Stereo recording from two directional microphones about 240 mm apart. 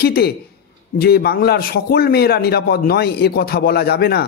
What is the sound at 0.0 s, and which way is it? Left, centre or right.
A man's voice, left.